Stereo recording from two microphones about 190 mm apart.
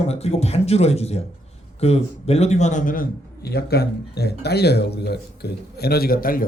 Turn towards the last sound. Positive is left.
turn(degrees=50)  # may be behind; listen again after turning